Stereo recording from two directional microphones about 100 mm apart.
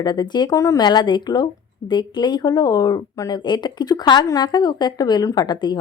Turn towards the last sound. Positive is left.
turn(degrees=45)  # may be behind; listen again after turning